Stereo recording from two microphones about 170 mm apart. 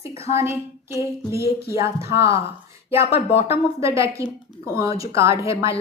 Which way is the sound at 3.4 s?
15° right (ahead or behind).